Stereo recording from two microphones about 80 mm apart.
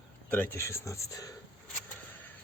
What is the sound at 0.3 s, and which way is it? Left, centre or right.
Speech, left.